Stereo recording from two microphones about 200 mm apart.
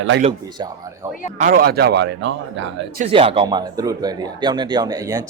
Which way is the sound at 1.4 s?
45° right (ahead or behind).